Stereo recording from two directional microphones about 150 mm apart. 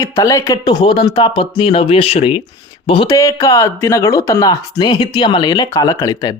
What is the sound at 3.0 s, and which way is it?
Speech, 20° left (ahead or behind).